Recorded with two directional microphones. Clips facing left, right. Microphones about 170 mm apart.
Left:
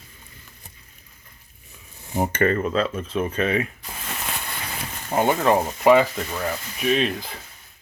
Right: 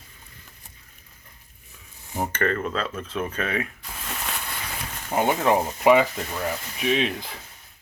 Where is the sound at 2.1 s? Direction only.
15° left (ahead or behind); by 3.7 s centre (ahead or behind).